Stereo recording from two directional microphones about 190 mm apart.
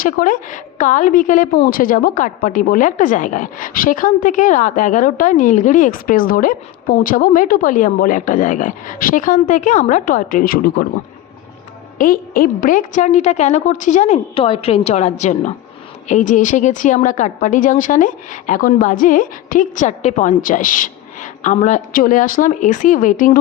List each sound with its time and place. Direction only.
0.0 s speech: 45° left (ahead or behind)
11.9 s a woman's voice: 50° left (ahead or behind)